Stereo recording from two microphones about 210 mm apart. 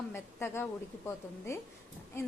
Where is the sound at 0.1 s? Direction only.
10° left (ahead or behind).